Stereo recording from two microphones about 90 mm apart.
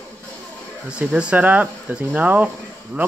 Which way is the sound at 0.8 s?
15° right (ahead or behind).